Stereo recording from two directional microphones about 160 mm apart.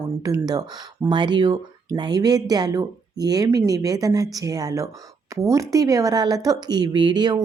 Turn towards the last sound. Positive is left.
turn(degrees=-25)  # may be behind; listen again after turning